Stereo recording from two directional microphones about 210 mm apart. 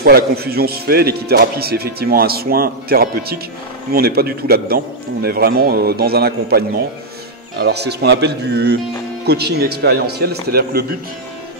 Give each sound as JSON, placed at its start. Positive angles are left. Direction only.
{"t": 0.0, "sound": "speech", "side_deg": -50}